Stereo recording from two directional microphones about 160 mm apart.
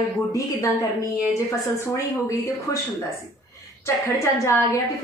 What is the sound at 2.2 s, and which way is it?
Speech, 20° left (ahead or behind).